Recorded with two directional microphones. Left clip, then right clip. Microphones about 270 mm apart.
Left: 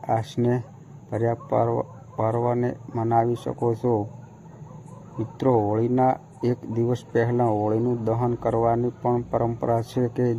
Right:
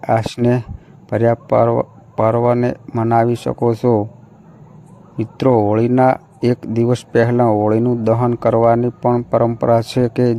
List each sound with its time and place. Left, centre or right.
0.0 s speech: right
5.4 s speech: right